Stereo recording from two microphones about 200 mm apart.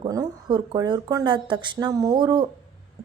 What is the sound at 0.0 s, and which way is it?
A woman's voice, 20° right (ahead or behind).